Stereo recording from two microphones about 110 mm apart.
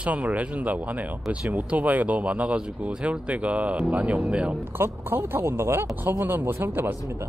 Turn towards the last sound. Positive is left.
turn(degrees=-20)  # may be behind; listen again after turning